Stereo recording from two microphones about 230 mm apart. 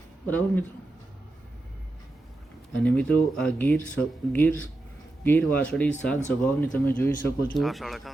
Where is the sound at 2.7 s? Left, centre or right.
Centre.